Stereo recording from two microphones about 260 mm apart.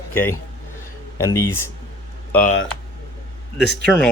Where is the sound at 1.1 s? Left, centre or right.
Centre.